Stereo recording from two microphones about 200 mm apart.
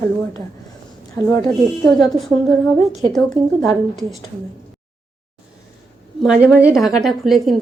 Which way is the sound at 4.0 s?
Centre (ahead or behind).